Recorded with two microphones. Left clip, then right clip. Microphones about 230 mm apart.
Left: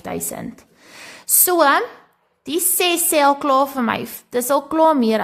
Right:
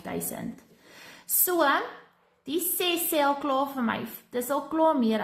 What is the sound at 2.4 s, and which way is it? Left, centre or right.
A woman's voice, left.